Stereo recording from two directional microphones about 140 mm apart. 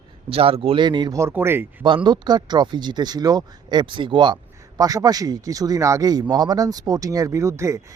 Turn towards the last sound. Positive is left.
turn(degrees=-20)  # may be behind; listen again after turning